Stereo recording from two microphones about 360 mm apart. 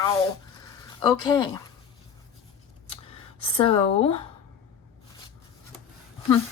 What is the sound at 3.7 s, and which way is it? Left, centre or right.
Speech, centre.